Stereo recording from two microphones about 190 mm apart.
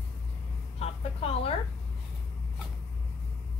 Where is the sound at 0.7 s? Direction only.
30° left (ahead or behind).